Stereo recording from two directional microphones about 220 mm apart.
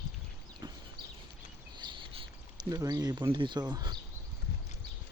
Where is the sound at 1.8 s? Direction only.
20° right (ahead or behind).